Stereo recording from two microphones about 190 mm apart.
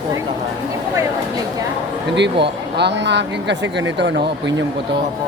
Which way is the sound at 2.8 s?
65° right (ahead or behind).